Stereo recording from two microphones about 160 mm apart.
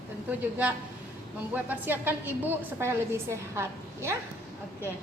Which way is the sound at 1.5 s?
10° right (ahead or behind).